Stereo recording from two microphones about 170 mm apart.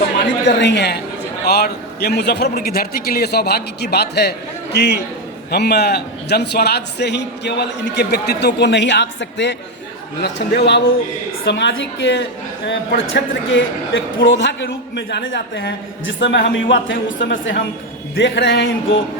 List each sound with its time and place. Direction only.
0.4 s a man's voice: 90° left